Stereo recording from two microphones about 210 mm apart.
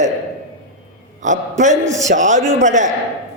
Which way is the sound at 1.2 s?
35° right (ahead or behind).